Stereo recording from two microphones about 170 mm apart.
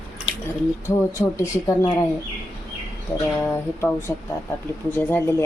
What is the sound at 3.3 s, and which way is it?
Speech, 15° left (ahead or behind).